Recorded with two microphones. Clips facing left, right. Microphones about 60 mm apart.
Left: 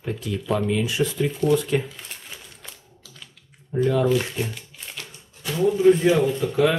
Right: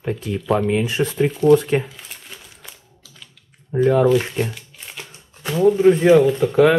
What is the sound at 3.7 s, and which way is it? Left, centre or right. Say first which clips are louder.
Speech: right 5 dB; right.